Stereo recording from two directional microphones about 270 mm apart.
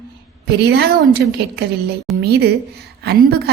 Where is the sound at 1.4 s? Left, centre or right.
Right.